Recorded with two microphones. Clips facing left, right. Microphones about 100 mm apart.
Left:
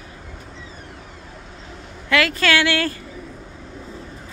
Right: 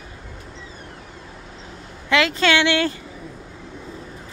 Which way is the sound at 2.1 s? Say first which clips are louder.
Right 1 dB; 20° right (ahead or behind).